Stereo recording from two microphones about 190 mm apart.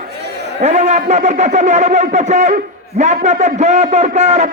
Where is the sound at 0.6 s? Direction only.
35° right (ahead or behind).